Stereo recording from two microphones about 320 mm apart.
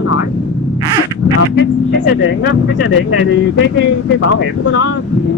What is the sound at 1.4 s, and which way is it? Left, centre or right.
Speech, left.